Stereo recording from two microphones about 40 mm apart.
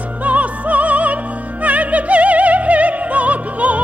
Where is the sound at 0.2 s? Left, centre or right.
Right.